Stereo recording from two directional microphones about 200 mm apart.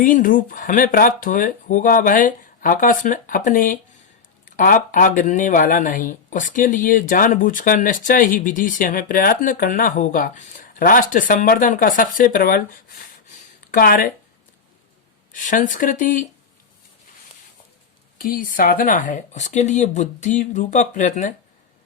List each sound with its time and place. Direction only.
0.0 s speech: 40° left (ahead or behind)
13.2 s a sound: 45° left (ahead or behind)
15.3 s speech: 40° left (ahead or behind)
18.2 s speech: 45° left (ahead or behind)